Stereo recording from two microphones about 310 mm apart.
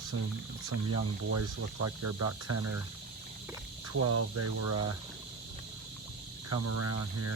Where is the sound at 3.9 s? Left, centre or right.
Right.